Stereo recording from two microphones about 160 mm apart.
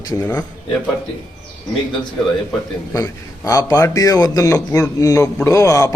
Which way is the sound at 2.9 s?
20° left (ahead or behind).